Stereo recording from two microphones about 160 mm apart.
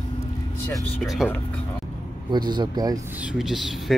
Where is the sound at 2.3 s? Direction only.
25° right (ahead or behind).